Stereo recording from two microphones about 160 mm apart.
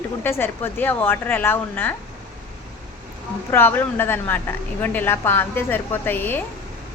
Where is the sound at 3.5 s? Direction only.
15° left (ahead or behind).